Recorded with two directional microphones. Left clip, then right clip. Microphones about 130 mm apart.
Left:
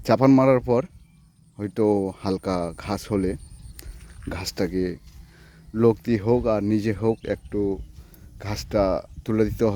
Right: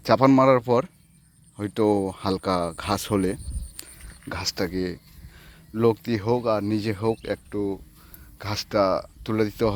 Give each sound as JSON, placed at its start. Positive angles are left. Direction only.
{"t": 0.0, "sound": "speech", "side_deg": 40}
{"t": 4.3, "sound": "speech", "side_deg": 60}